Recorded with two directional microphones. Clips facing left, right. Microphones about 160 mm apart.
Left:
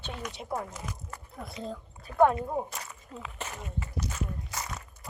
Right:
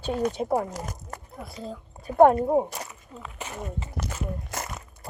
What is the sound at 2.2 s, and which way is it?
Speech, 45° right (ahead or behind).